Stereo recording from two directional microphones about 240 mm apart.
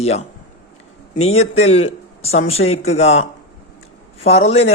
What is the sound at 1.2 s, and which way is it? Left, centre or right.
A man's voice, left.